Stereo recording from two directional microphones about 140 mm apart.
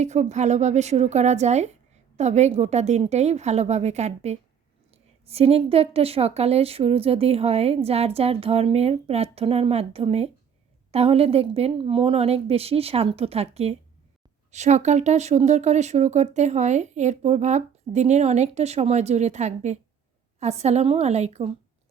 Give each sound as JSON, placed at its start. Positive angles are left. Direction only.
{"t": 0.0, "sound": "a woman's voice", "side_deg": -55}